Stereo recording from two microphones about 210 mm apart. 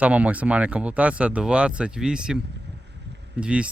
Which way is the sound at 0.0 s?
5° right (ahead or behind).